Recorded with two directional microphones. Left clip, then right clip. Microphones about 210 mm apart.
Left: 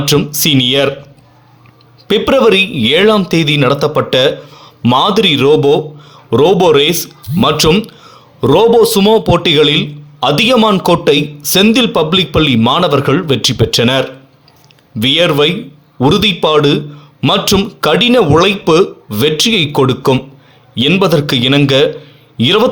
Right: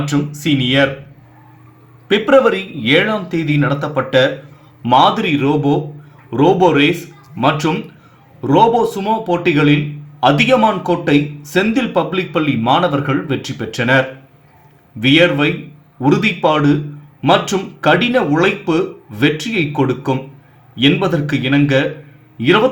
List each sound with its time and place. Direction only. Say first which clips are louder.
0.3 s a man's voice: even; 50° left (ahead or behind)
2.0 s a man's voice: left 2 dB; 45° left (ahead or behind)